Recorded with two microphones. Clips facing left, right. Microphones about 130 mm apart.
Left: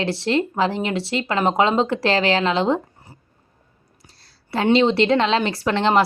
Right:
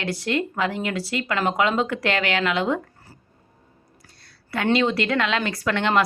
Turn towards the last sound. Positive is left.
turn(degrees=30)  # may be behind; listen again after turning